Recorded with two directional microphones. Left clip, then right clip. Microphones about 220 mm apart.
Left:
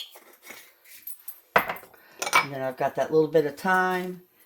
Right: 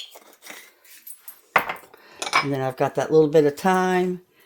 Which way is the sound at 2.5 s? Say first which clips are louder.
Right 4 dB; 50° right (ahead or behind).